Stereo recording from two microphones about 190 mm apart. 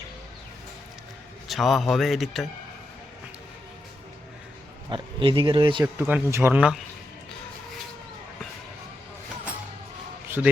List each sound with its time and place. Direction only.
1.5 s speech: centre (ahead or behind)
4.9 s speech: 25° right (ahead or behind)
6.0 s speech: 10° right (ahead or behind)
10.2 s a sound: 10° right (ahead or behind)